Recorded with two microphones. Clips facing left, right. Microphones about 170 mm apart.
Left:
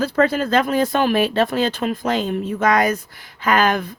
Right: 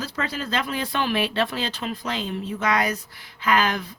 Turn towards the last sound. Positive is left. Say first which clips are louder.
# left 5 dB
turn(degrees=50)  # may be behind; listen again after turning